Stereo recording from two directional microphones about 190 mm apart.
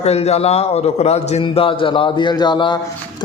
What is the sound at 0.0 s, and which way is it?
A man's voice, 35° left (ahead or behind).